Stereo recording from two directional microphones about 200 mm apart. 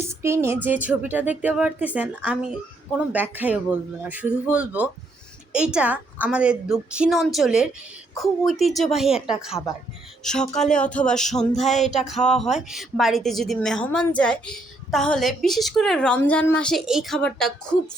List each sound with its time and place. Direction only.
0.2 s a woman's voice: 15° right (ahead or behind); by 11.4 s 5° left (ahead or behind)
11.7 s music: 35° left (ahead or behind)
11.9 s a woman's voice: centre (ahead or behind)